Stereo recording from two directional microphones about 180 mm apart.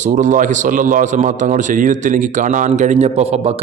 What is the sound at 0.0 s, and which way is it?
A man's voice, 45° right (ahead or behind).